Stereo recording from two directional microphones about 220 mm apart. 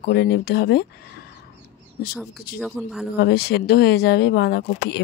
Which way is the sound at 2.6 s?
Centre (ahead or behind).